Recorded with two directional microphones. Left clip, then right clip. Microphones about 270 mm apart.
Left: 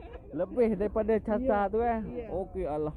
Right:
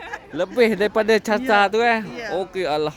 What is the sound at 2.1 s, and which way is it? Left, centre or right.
Speech, right.